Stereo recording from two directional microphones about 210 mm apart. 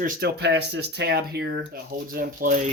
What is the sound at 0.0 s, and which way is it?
Speech, 50° right (ahead or behind).